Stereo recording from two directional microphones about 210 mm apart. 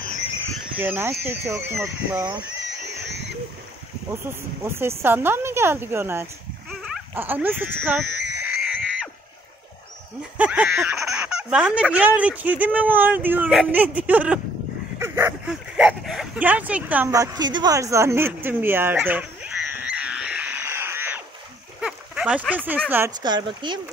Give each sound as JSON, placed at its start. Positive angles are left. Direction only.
{"t": 0.7, "sound": "speech", "side_deg": -10}
{"t": 4.3, "sound": "speech", "side_deg": -10}
{"t": 8.5, "sound": "wild animals", "side_deg": 0}
{"t": 10.3, "sound": "speech", "side_deg": -5}
{"t": 21.8, "sound": "a sound", "side_deg": -5}
{"t": 22.7, "sound": "speech", "side_deg": -10}
{"t": 23.2, "sound": "speech", "side_deg": -20}